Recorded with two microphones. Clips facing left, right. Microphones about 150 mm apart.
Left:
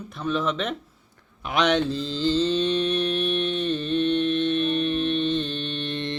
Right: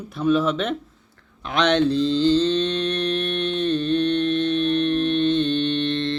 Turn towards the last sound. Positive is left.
turn(degrees=10)  # may be behind; listen again after turning